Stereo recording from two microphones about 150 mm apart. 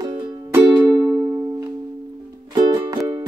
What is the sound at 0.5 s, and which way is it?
Music, 25° right (ahead or behind).